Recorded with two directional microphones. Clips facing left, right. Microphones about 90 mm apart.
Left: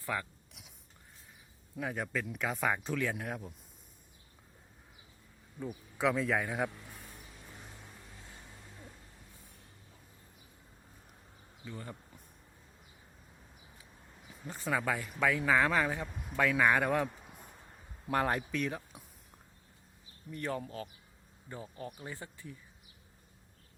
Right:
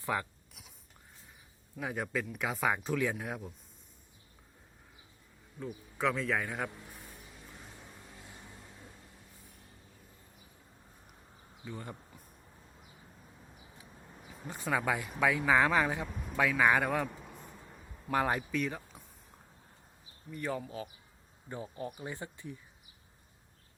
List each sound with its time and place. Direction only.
0.0 s speech: 20° right (ahead or behind)
1.8 s speech: 5° right (ahead or behind)
5.5 s speech: 5° left (ahead or behind)
11.6 s speech: 15° right (ahead or behind)
14.4 s speech: 5° right (ahead or behind)
18.1 s speech: centre (ahead or behind)
20.3 s speech: 5° right (ahead or behind)
21.5 s speech: 25° right (ahead or behind)